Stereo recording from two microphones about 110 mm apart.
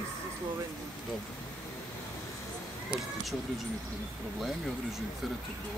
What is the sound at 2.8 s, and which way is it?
Speech, centre (ahead or behind).